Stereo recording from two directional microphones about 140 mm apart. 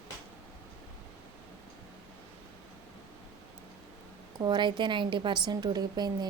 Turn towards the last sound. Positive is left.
turn(degrees=-30)  # may be behind; listen again after turning